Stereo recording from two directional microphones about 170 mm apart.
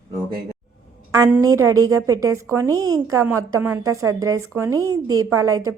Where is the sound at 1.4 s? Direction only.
20° right (ahead or behind).